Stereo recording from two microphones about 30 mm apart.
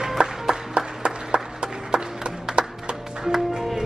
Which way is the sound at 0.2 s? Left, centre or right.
Right.